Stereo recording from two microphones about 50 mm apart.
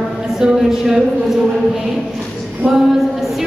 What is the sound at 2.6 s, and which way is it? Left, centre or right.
Speech, centre.